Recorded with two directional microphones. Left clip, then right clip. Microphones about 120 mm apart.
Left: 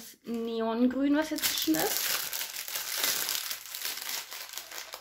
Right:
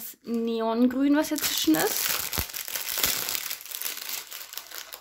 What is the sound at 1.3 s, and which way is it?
Speech, 65° right (ahead or behind).